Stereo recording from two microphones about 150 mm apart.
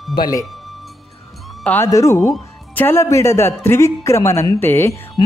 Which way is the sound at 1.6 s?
10° left (ahead or behind).